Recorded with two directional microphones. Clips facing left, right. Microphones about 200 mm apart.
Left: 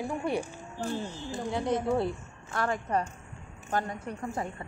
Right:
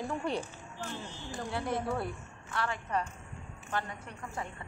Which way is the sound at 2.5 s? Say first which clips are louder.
Left 4 dB; 45° left (ahead or behind).